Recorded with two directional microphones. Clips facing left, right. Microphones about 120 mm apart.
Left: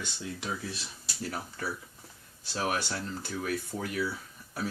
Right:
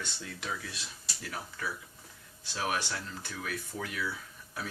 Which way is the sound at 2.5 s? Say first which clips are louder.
Left 2 dB; 40° left (ahead or behind).